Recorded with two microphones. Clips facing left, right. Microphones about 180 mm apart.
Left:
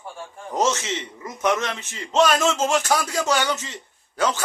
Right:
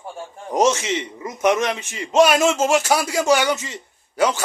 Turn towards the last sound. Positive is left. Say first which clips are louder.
# right 4 dB
turn(degrees=-10)  # may be behind; listen again after turning